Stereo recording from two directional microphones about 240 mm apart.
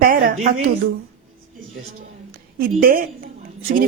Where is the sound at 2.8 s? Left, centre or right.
Right.